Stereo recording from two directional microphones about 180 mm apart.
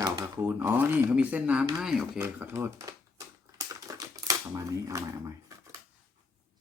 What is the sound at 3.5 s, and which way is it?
Typing, 20° right (ahead or behind).